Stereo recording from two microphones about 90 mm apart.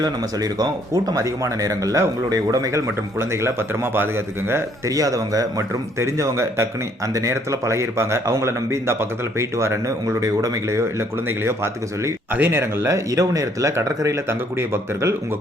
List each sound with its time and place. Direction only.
0.0 s a man's voice: 45° right (ahead or behind); by 4.6 s 25° right (ahead or behind)
4.9 s speech: 40° right (ahead or behind)